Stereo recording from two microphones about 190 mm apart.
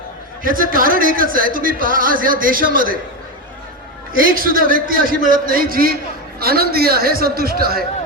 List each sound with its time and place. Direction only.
0.4 s a man's voice: 45° right (ahead or behind)
4.2 s a man's voice: 50° right (ahead or behind)